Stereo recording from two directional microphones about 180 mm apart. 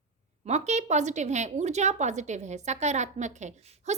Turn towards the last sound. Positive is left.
turn(degrees=-40)  # may be behind; listen again after turning